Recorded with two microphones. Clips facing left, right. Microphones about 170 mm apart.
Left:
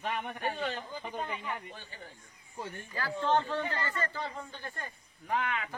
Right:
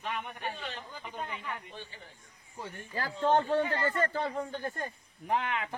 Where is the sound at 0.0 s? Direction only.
45° left (ahead or behind).